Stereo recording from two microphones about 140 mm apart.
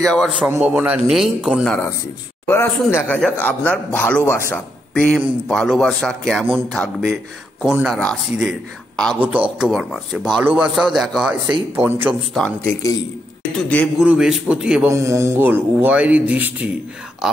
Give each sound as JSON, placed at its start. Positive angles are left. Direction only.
{"t": 0.0, "sound": "a man's voice", "side_deg": 5}
{"t": 0.6, "sound": "a man's voice", "side_deg": -10}
{"t": 2.4, "sound": "a man's voice", "side_deg": 15}
{"t": 8.0, "sound": "a man's voice", "side_deg": 5}
{"t": 11.7, "sound": "a man's voice", "side_deg": -15}
{"t": 12.4, "sound": "a man's voice", "side_deg": 10}
{"t": 13.9, "sound": "a man's voice", "side_deg": -5}
{"t": 14.9, "sound": "a man's voice", "side_deg": -20}